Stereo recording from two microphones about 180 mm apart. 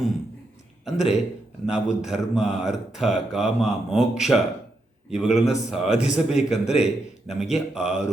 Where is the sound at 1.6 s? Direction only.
5° right (ahead or behind).